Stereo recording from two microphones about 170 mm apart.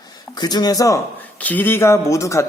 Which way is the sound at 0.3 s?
25° left (ahead or behind).